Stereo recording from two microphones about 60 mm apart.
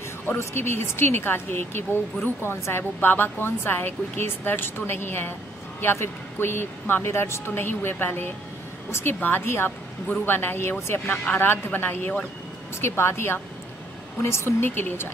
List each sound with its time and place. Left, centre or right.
0.4 s speech: left
12.8 s speech: left